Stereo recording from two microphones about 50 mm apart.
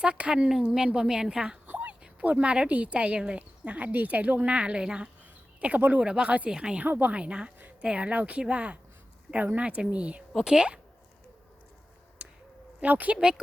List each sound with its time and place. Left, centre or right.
0.0 s a woman's voice: right
1.6 s a sound: right
2.4 s speech: right
6.8 s speech: right
7.1 s speech: right
10.4 s a woman's voice: centre
12.8 s speech: right
13.1 s a woman's voice: centre